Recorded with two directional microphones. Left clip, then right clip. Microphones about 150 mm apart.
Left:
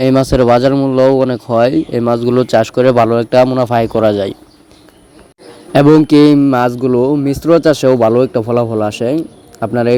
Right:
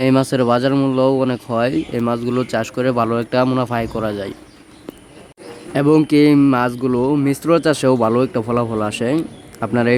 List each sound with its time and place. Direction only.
0.0 s speech: 30° left (ahead or behind)
0.7 s speech: 20° left (ahead or behind)
0.9 s speech: 30° left (ahead or behind)
5.7 s speech: 40° left (ahead or behind); by 9.9 s 20° left (ahead or behind)